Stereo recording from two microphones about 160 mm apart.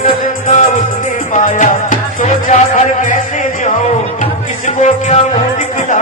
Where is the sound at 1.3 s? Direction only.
50° left (ahead or behind).